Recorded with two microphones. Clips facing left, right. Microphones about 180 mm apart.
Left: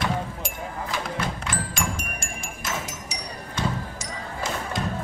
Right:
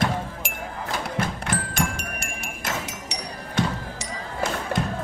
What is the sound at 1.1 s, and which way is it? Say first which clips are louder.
Music: right 2 dB; 60° right (ahead or behind).